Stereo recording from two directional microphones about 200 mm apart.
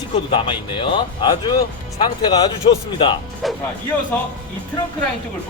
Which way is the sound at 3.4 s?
Centre (ahead or behind).